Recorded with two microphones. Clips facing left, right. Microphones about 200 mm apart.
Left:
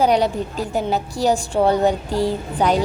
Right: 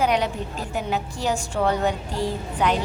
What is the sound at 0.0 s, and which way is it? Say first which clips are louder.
A woman's voice: left 5 dB; 35° left (ahead or behind).